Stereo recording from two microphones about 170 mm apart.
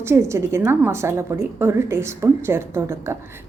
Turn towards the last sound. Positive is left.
turn(degrees=-15)  # may be behind; listen again after turning